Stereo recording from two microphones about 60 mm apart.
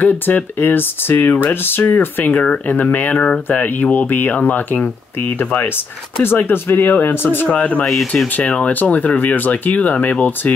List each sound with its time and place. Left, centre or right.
0.0 s speech: left
6.2 s speech: left
7.4 s speech: left
7.8 s speech: centre
8.4 s speech: left